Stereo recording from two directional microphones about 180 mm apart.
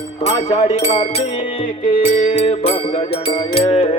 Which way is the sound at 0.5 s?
40° left (ahead or behind).